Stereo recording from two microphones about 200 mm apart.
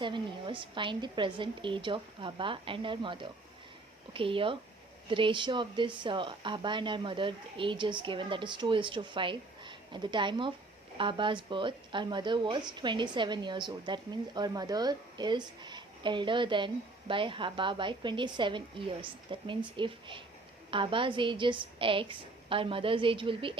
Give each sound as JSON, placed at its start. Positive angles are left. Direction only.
{"t": 0.0, "sound": "speech", "side_deg": -25}